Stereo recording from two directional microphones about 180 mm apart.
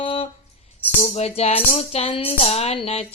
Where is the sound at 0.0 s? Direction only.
30° left (ahead or behind).